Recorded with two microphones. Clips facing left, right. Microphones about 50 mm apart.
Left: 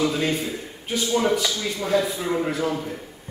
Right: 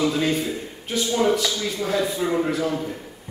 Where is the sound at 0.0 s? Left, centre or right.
Centre.